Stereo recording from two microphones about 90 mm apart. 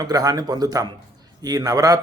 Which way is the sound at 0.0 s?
45° right (ahead or behind).